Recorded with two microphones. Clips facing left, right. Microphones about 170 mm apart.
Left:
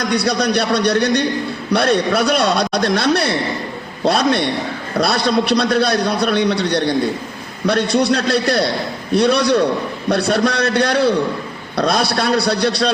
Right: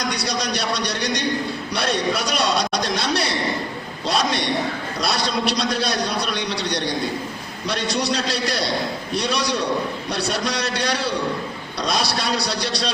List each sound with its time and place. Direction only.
0.1 s a man's voice: 55° left (ahead or behind)